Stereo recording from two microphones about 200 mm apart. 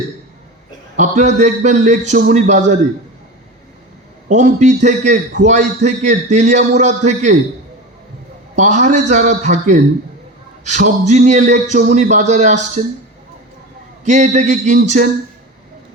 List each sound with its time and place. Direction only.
0.9 s a man's voice: 35° right (ahead or behind)
4.3 s a man's voice: 35° right (ahead or behind)
8.5 s a man's voice: 35° right (ahead or behind)
14.0 s a man's voice: 35° right (ahead or behind)